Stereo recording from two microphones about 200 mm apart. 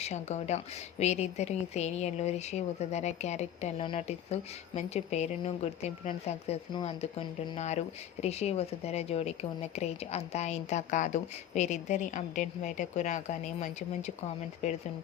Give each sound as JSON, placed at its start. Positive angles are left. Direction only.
{"t": 0.0, "sound": "speech", "side_deg": 35}